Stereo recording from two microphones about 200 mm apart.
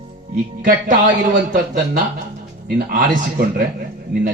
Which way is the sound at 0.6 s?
40° right (ahead or behind).